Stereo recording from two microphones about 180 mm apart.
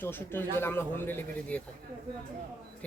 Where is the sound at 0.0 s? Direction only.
10° left (ahead or behind).